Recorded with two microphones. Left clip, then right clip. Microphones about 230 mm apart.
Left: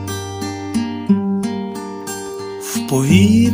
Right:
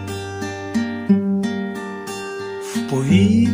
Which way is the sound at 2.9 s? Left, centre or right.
Left.